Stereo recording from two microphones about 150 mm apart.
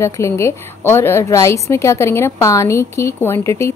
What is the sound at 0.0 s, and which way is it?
A woman's voice, 20° left (ahead or behind).